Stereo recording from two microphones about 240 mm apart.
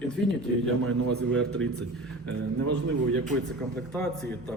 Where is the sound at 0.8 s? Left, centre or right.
Right.